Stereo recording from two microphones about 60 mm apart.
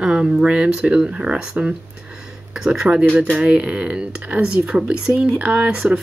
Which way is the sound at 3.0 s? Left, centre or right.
Right.